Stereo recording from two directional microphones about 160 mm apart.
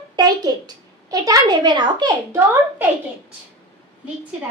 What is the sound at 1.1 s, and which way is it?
A child's voice, 20° right (ahead or behind).